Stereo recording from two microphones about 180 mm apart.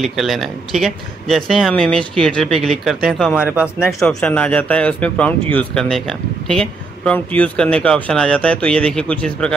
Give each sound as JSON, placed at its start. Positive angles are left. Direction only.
{"t": 0.0, "sound": "speech", "side_deg": 0}
{"t": 3.8, "sound": "speech", "side_deg": 5}